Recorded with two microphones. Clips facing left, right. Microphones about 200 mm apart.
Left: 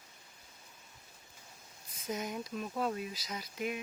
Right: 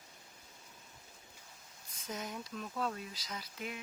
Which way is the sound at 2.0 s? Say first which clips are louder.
Left 5 dB; 10° left (ahead or behind).